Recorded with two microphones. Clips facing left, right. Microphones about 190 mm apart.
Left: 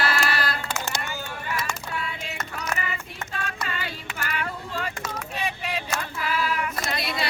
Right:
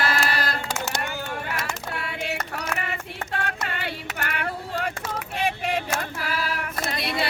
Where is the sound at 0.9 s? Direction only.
55° right (ahead or behind); by 6.7 s 40° right (ahead or behind).